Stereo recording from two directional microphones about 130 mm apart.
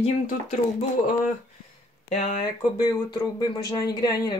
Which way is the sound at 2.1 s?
60° left (ahead or behind).